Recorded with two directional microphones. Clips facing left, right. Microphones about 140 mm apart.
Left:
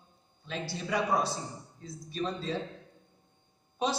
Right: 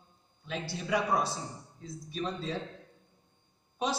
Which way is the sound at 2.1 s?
10° right (ahead or behind).